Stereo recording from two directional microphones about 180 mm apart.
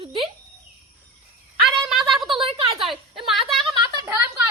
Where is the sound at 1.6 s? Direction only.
Centre (ahead or behind).